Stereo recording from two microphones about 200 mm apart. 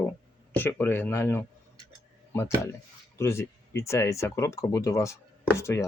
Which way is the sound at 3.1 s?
15° left (ahead or behind).